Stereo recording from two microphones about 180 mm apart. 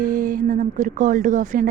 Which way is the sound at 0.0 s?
50° right (ahead or behind).